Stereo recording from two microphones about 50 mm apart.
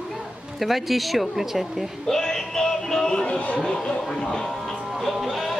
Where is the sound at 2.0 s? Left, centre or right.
Centre.